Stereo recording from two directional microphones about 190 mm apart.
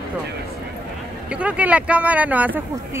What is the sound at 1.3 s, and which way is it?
Speech, 5° right (ahead or behind).